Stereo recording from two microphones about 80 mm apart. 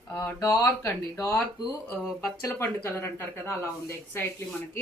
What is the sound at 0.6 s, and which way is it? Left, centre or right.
Speech, left.